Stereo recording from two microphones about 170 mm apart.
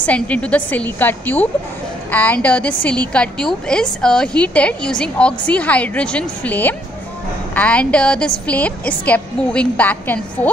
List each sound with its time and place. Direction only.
0.0 s a woman's voice: 10° left (ahead or behind)